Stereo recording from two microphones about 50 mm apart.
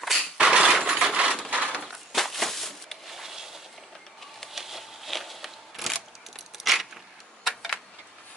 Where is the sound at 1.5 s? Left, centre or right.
Right.